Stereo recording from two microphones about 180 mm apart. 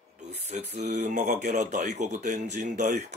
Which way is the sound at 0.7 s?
40° right (ahead or behind).